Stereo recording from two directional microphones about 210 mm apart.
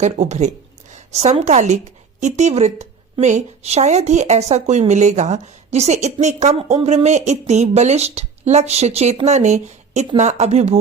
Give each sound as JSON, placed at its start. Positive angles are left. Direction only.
{"t": 0.0, "sound": "a woman's voice", "side_deg": -35}